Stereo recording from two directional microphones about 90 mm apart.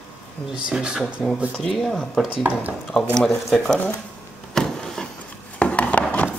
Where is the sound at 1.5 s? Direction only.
5° left (ahead or behind).